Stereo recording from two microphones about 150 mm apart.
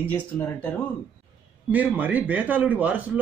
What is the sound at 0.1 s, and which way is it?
Speech, 10° left (ahead or behind).